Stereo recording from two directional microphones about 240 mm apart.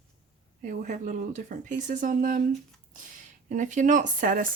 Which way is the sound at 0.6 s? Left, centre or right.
Right.